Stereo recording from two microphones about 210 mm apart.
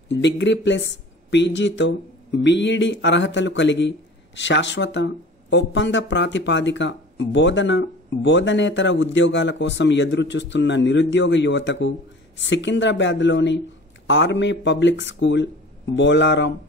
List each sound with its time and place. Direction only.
0.1 s speech: 60° left (ahead or behind)